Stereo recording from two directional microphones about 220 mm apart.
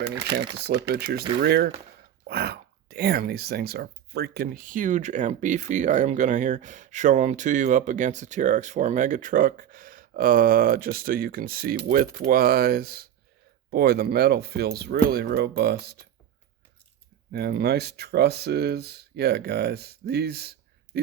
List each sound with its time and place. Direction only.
0.9 s speech: 45° right (ahead or behind)
17.3 s speech: 45° right (ahead or behind)